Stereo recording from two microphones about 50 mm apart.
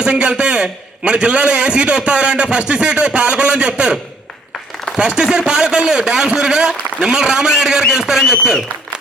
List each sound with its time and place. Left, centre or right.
0.0 s a man's voice: right
4.9 s a man's voice: centre